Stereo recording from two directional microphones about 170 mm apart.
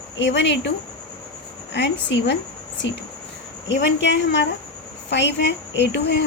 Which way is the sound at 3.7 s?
90° left.